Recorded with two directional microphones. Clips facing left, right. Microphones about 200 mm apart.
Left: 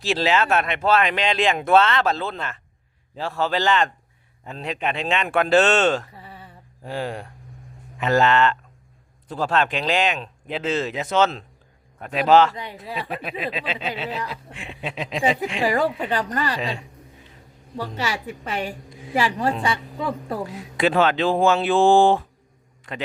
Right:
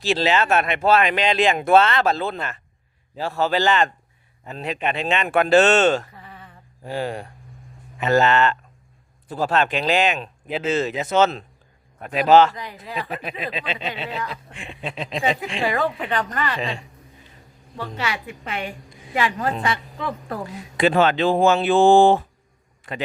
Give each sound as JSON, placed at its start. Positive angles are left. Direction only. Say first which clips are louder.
{"t": 0.0, "sound": "speech", "louder": "right 1 dB", "side_deg": 0}
{"t": 6.1, "sound": "a sound", "louder": "left 1 dB", "side_deg": 30}
{"t": 6.9, "sound": "speech", "louder": "right 2 dB", "side_deg": 0}
{"t": 14.5, "sound": "a sound", "louder": "even", "side_deg": 5}
{"t": 15.7, "sound": "a woman's voice", "louder": "left 1 dB", "side_deg": 35}
{"t": 18.0, "sound": "a woman's voice", "louder": "even", "side_deg": 35}
{"t": 20.5, "sound": "a man's voice", "louder": "right 3 dB", "side_deg": 5}